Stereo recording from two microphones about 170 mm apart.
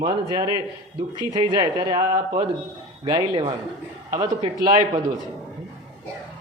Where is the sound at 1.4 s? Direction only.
25° right (ahead or behind).